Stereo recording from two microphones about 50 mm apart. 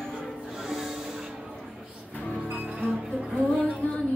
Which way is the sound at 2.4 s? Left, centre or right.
Right.